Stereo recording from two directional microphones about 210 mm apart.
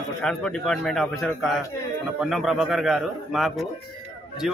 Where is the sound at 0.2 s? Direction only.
5° left (ahead or behind).